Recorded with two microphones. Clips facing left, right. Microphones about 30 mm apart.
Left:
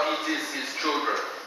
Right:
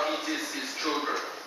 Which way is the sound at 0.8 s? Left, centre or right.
Centre.